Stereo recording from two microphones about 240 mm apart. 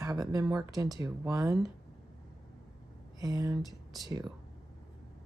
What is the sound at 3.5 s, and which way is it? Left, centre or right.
Speech, centre.